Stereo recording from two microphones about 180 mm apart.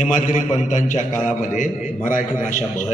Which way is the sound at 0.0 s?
45° left (ahead or behind).